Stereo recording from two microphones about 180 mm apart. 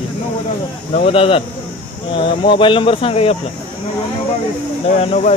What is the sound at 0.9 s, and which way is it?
Speech, 30° left (ahead or behind).